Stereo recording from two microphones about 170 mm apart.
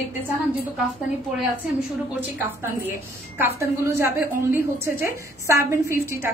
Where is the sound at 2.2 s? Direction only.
10° right (ahead or behind).